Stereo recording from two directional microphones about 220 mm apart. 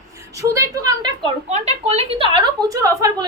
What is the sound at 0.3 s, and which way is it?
Speech, 15° right (ahead or behind).